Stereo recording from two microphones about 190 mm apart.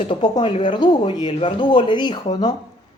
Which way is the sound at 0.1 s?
25° left (ahead or behind).